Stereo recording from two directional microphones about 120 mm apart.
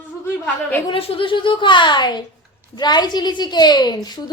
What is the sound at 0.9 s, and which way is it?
A woman's voice, 50° left (ahead or behind).